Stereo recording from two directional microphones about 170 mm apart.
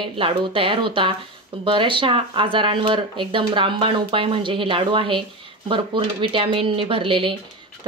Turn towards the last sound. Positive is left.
turn(degrees=-30)  # may be behind; listen again after turning